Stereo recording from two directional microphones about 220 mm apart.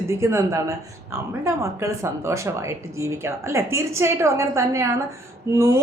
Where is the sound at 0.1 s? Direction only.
10° right (ahead or behind).